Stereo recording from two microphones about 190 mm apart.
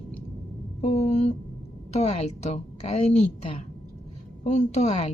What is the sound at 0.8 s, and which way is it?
A woman's voice, 35° left (ahead or behind).